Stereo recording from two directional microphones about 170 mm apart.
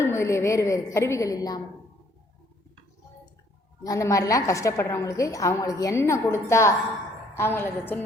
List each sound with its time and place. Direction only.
0.0 s a woman's voice: 15° left (ahead or behind)
3.8 s a woman's voice: 20° left (ahead or behind)